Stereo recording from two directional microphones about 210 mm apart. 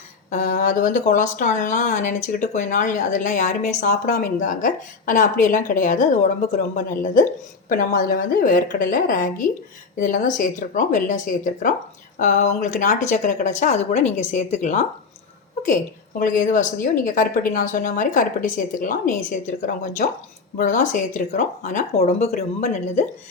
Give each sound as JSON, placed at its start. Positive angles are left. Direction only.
{"t": 0.3, "sound": "speech", "side_deg": 35}